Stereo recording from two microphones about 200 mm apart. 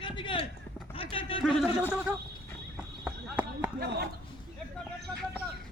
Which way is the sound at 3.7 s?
55° right (ahead or behind).